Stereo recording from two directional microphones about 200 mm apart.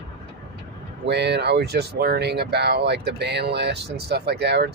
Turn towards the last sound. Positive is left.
turn(degrees=-55)  # may be behind; listen again after turning